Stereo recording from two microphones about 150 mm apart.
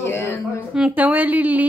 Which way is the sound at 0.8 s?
5° right (ahead or behind).